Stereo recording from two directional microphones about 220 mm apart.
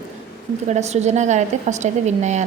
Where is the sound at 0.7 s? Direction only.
30° right (ahead or behind).